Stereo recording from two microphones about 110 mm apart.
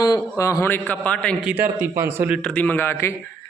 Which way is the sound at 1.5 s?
20° right (ahead or behind).